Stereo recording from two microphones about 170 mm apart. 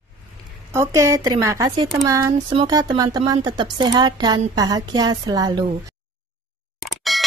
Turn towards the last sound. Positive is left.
turn(degrees=0)  # may be behind; listen again after turning